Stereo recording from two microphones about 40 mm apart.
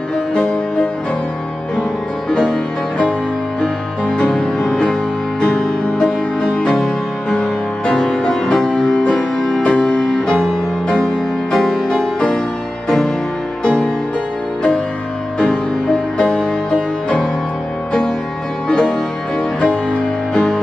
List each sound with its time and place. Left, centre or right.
2.2 s music: left
4.3 s music: centre
6.4 s music: left
6.7 s music: centre
9.1 s music: centre
9.6 s music: left
11.0 s music: centre
11.9 s music: left
13.7 s music: left
15.3 s music: left
18.7 s music: left